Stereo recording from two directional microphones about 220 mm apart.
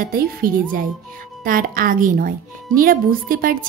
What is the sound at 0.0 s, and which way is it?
Speech, 40° right (ahead or behind).